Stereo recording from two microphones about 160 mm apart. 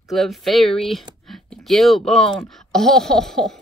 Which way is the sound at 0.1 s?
Centre (ahead or behind).